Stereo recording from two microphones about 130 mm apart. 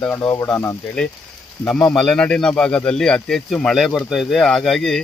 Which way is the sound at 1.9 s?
5° left (ahead or behind).